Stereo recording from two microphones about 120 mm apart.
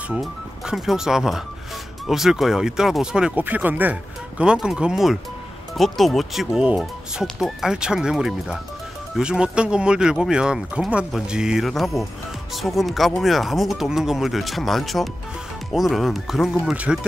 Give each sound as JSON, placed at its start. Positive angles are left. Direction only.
{"t": 0.1, "sound": "speech", "side_deg": -5}